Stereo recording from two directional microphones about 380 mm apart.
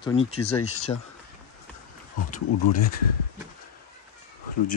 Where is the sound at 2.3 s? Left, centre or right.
Left.